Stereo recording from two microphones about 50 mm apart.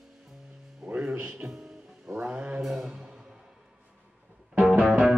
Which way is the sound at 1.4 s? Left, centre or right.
Right.